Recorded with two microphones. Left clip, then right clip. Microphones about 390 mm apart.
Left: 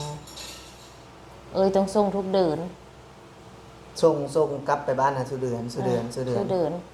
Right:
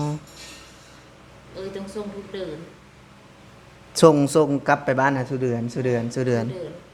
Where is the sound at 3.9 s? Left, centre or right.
Right.